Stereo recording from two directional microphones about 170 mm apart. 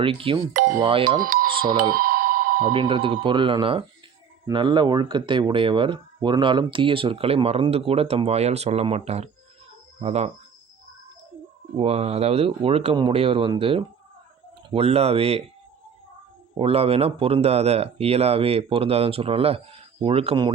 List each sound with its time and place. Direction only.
0.0 s speech: 30° right (ahead or behind)
1.9 s a sound: 55° right (ahead or behind)
2.7 s speech: 30° right (ahead or behind)
11.8 s speech: 35° right (ahead or behind)
16.6 s speech: 35° right (ahead or behind)